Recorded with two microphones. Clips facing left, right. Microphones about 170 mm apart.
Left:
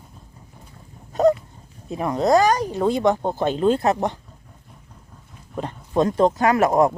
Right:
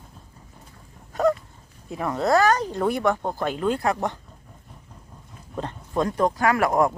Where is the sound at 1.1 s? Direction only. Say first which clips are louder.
Left 4 dB; 25° left (ahead or behind).